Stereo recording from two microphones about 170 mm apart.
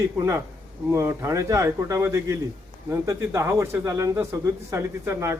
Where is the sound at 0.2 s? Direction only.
20° right (ahead or behind).